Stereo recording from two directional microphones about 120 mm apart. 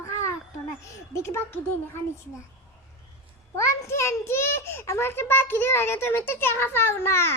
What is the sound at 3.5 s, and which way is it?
A child's voice, 25° left (ahead or behind).